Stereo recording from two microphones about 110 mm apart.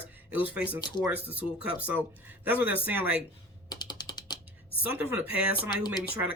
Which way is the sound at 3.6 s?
40° left (ahead or behind).